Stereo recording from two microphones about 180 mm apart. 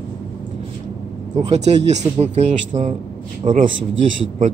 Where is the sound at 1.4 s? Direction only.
40° right (ahead or behind).